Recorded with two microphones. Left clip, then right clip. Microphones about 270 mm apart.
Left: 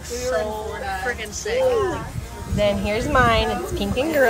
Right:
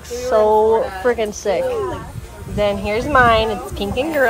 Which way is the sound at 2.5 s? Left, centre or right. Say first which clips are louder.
Right 3 dB; centre.